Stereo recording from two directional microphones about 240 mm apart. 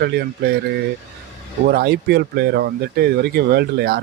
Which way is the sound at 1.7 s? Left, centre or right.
Right.